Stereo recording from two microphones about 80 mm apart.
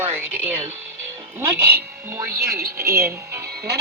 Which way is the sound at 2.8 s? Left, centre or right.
Right.